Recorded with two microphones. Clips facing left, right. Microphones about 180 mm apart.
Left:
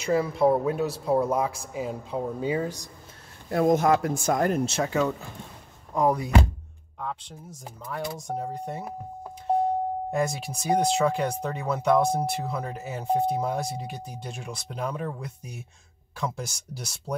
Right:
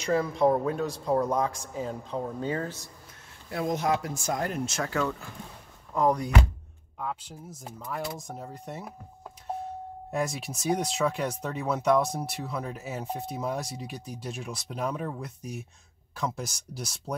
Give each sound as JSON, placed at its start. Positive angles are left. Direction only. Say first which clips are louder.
{"t": 0.0, "sound": "speech", "louder": "left 2 dB", "side_deg": 5}
{"t": 3.4, "sound": "speech", "louder": "left 7 dB", "side_deg": 50}
{"t": 4.6, "sound": "speech", "louder": "left 4 dB", "side_deg": 25}
{"t": 5.9, "sound": "speech", "louder": "left 1 dB", "side_deg": 5}
{"t": 7.0, "sound": "speech", "louder": "even", "side_deg": -5}
{"t": 10.1, "sound": "speech", "louder": "right 2 dB", "side_deg": 0}